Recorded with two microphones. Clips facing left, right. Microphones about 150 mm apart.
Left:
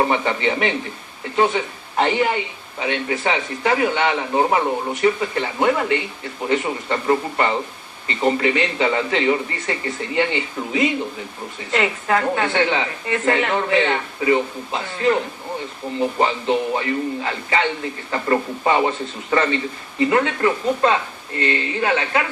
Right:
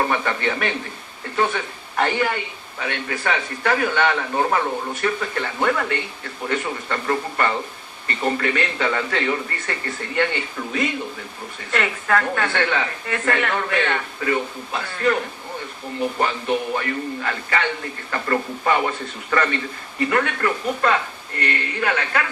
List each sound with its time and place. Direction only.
0.0 s a man's voice: 15° left (ahead or behind)